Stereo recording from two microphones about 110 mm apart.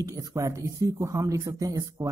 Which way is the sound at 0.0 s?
30° right (ahead or behind).